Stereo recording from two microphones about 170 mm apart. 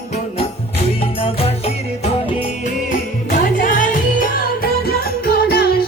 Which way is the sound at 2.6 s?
50° left (ahead or behind).